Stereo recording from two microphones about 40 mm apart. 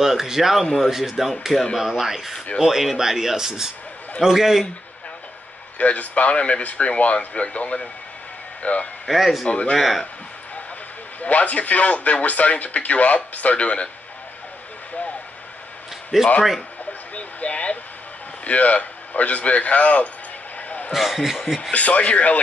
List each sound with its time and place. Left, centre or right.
0.0 s speech: centre
1.5 s speech: centre
1.8 s speech: centre
5.8 s speech: left
9.0 s speech: centre
9.5 s speech: left
9.8 s speech: centre
11.1 s speech: left
16.1 s speech: centre
17.1 s vehicle: left
18.4 s a man's voice: left
20.9 s speech: centre
21.7 s speech: left